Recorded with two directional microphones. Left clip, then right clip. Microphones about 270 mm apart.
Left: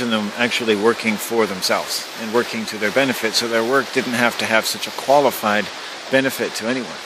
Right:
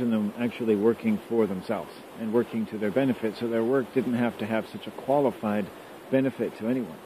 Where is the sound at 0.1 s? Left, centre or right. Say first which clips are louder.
Left 11 dB; centre.